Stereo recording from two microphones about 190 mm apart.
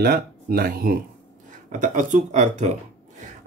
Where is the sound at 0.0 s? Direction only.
55° right (ahead or behind).